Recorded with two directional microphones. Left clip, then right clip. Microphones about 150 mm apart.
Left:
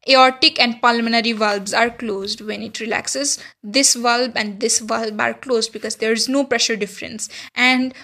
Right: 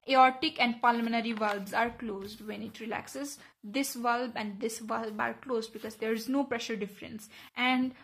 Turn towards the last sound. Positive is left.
turn(degrees=30)  # may be behind; listen again after turning